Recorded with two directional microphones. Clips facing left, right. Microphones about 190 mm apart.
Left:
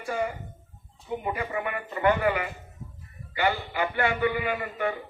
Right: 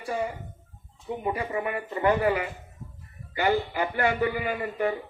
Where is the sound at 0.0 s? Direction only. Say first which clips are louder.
Even; 30° right (ahead or behind).